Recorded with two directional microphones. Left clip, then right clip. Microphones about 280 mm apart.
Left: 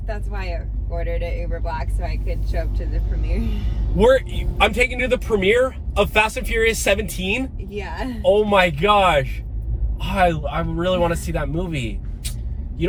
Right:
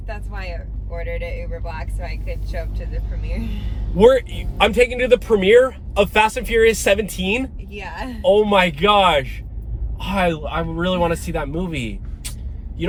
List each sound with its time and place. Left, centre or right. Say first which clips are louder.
0.1 s speech: left 2 dB; centre
3.9 s speech: right 2 dB; centre
7.7 s speech: left 1 dB; centre
8.4 s speech: right 1 dB; centre